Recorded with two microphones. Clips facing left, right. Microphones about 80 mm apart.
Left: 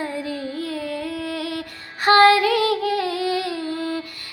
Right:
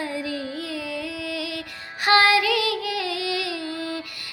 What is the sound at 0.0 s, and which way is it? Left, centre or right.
Music, left.